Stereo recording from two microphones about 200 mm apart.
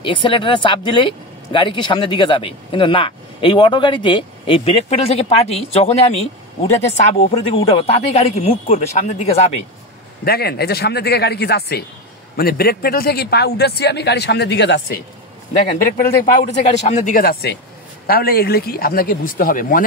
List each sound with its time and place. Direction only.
0.0 s speech: 25° left (ahead or behind)
7.2 s speech: 30° left (ahead or behind)
10.2 s a man's voice: 50° left (ahead or behind)
16.0 s speech: 40° left (ahead or behind)